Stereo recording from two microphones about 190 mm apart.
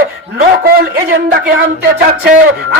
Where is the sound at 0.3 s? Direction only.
50° right (ahead or behind).